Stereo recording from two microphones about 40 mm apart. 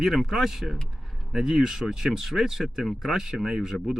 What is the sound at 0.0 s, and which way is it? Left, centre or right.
Speech, centre.